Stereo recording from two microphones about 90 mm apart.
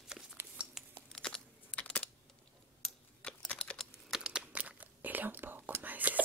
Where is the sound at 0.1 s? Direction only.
5° right (ahead or behind).